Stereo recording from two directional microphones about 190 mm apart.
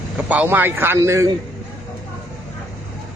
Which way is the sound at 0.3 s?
10° right (ahead or behind).